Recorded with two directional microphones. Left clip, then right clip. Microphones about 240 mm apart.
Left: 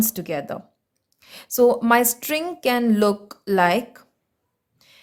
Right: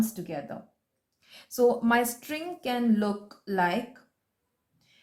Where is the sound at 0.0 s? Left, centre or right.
Left.